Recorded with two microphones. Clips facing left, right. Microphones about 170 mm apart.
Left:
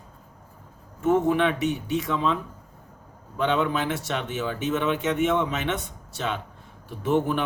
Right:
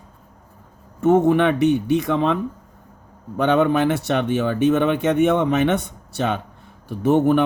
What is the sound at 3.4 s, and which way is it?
Speech, 70° right (ahead or behind).